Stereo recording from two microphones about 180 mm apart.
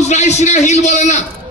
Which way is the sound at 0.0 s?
40° left (ahead or behind).